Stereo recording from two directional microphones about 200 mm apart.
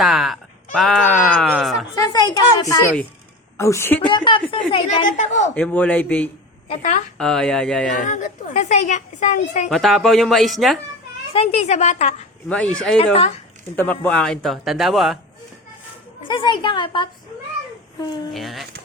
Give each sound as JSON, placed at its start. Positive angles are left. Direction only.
{"t": 0.0, "sound": "speech", "side_deg": 0}
{"t": 2.0, "sound": "speech", "side_deg": 20}
{"t": 4.0, "sound": "a woman's voice", "side_deg": 25}
{"t": 5.5, "sound": "speech", "side_deg": 5}
{"t": 6.7, "sound": "a woman's voice", "side_deg": 35}
{"t": 7.2, "sound": "speech", "side_deg": 5}
{"t": 8.0, "sound": "a woman's voice", "side_deg": 40}
{"t": 9.6, "sound": "speech", "side_deg": 0}
{"t": 11.3, "sound": "a woman's voice", "side_deg": 30}
{"t": 12.5, "sound": "speech", "side_deg": 5}
{"t": 16.2, "sound": "a woman's voice", "side_deg": 25}
{"t": 18.3, "sound": "speech", "side_deg": 0}